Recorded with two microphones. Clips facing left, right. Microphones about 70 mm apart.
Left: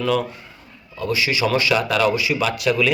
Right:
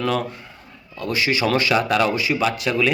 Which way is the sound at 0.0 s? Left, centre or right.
Right.